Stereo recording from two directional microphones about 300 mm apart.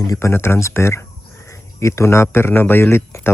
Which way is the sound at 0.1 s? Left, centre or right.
Centre.